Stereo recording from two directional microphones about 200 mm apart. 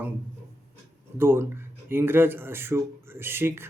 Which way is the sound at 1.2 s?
10° right (ahead or behind).